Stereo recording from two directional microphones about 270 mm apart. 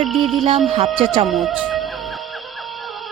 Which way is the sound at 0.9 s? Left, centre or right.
Centre.